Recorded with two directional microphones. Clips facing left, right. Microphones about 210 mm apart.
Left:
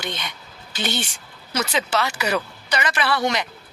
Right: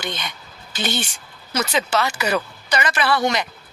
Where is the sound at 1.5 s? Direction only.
45° right (ahead or behind).